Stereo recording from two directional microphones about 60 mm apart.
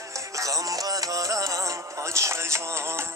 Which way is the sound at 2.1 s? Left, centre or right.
Right.